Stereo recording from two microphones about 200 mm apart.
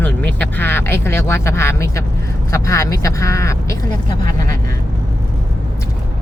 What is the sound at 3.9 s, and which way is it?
Speech, 40° right (ahead or behind).